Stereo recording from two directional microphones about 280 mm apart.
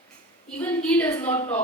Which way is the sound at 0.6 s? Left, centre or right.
Centre.